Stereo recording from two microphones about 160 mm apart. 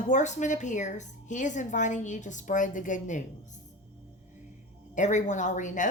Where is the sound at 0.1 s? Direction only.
50° left (ahead or behind).